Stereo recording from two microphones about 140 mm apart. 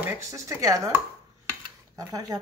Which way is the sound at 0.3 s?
20° right (ahead or behind).